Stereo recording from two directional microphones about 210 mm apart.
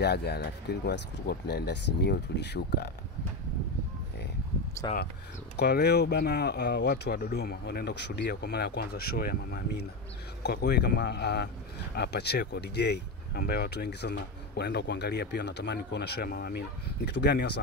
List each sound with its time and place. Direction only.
0.0 s speech: 50° left (ahead or behind)
4.8 s speech: 20° left (ahead or behind)
5.6 s speech: 50° left (ahead or behind)